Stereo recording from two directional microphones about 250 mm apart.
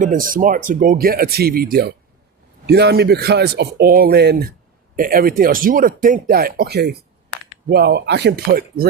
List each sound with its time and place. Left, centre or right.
0.0 s speech: right